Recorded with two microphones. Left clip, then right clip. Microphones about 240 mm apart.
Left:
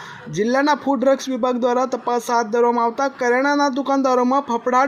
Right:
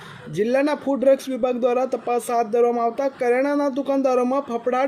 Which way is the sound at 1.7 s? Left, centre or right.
Centre.